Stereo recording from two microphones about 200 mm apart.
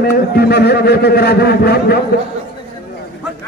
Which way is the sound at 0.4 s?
55° left (ahead or behind).